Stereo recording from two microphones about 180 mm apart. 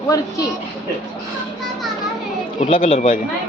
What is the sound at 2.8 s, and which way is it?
Speech, 35° left (ahead or behind).